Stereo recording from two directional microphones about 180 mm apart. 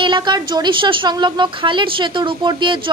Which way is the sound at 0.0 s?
25° right (ahead or behind).